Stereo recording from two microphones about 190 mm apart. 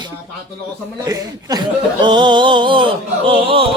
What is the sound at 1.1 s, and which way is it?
Speech, 20° right (ahead or behind).